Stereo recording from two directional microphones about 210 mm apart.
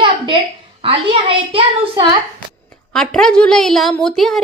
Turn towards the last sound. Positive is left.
turn(degrees=0)  # may be behind; listen again after turning